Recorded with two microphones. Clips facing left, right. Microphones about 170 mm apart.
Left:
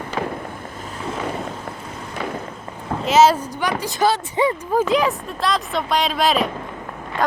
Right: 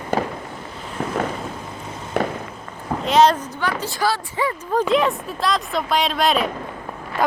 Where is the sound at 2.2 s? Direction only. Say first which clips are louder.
Right 6 dB; 60° right (ahead or behind).